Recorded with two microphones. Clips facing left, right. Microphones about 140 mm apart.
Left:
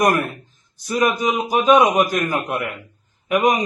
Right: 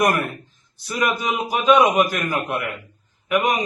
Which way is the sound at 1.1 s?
45° left (ahead or behind).